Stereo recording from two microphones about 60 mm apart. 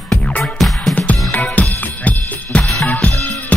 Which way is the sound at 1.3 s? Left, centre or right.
Left.